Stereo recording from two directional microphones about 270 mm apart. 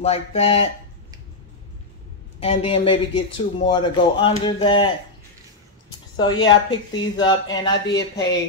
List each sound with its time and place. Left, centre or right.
0.0 s speech: left
2.4 s speech: left
6.1 s a woman's voice: centre
6.4 s speech: left
7.2 s speech: centre